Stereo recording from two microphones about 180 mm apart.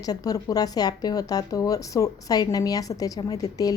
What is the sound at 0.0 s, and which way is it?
A woman's voice, 20° left (ahead or behind).